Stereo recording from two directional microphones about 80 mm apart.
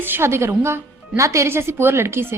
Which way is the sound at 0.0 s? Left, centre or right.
Right.